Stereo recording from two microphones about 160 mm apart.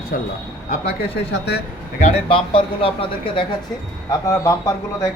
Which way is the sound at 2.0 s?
35° left (ahead or behind).